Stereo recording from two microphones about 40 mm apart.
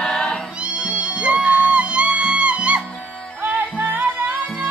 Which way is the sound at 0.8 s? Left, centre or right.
Right.